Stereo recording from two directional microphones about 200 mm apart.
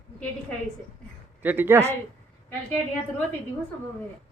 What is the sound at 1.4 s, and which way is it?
Speech, 10° right (ahead or behind).